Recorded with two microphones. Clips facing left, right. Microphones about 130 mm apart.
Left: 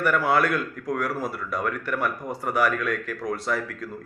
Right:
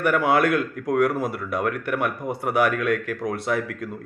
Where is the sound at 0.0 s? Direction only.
55° right (ahead or behind).